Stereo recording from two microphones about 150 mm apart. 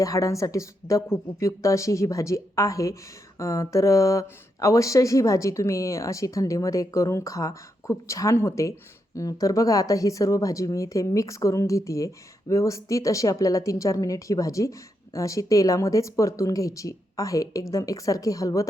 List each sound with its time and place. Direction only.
0.0 s speech: 20° left (ahead or behind)